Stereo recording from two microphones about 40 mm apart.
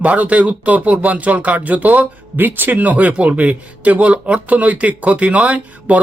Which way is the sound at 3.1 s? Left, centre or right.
Right.